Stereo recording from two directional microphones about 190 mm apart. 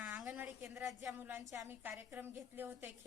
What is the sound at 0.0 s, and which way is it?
A woman's voice, 5° right (ahead or behind).